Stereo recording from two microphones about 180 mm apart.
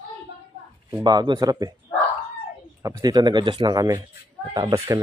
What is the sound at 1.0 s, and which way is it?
Speech, 25° right (ahead or behind).